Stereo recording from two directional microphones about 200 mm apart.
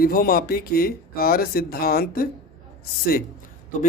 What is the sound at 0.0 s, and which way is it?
Speech, 50° left (ahead or behind).